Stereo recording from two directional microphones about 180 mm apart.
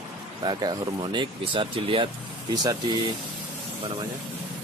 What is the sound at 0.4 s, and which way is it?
Speech, 25° right (ahead or behind).